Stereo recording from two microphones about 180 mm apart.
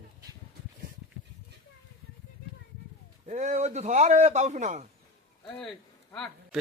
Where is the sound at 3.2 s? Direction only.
40° right (ahead or behind).